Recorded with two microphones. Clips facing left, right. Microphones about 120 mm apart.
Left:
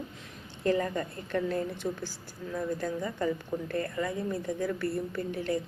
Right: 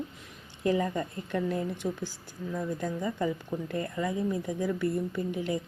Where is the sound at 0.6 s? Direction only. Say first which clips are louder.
Even; 15° right (ahead or behind).